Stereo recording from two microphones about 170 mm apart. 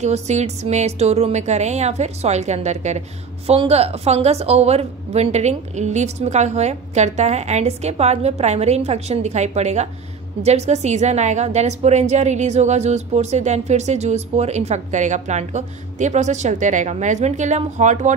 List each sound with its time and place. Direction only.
0.0 s a woman's voice: 40° right (ahead or behind)